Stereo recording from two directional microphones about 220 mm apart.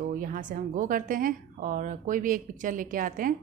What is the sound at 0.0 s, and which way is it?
Speech, 40° right (ahead or behind).